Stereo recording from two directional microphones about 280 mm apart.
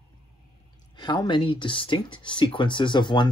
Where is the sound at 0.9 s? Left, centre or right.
Centre.